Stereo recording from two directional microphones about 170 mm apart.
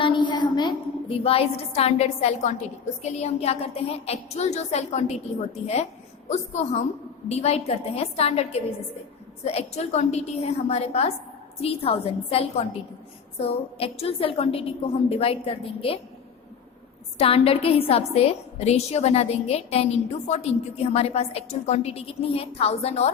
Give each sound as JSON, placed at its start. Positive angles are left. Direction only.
{"t": 0.0, "sound": "a sound", "side_deg": 30}
{"t": 1.2, "sound": "a woman's voice", "side_deg": 35}
{"t": 17.2, "sound": "a woman's voice", "side_deg": 35}